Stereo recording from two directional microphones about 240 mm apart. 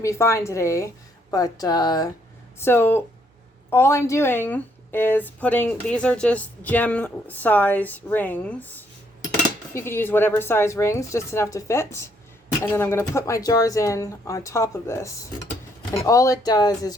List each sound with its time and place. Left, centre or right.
0.0 s speech: centre
9.7 s speech: centre